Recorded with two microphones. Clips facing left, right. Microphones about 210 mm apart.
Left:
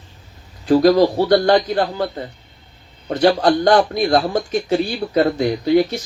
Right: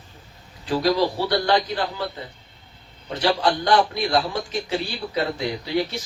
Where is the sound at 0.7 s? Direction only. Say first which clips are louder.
Left 8 dB; 45° left (ahead or behind).